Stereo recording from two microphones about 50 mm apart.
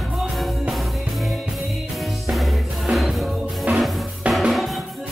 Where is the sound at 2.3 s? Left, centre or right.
Centre.